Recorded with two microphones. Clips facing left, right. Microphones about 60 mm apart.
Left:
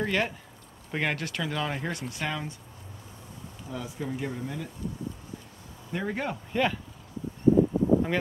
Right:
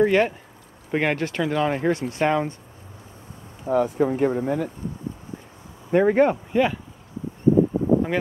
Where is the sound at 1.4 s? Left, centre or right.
Centre; by 2.5 s right.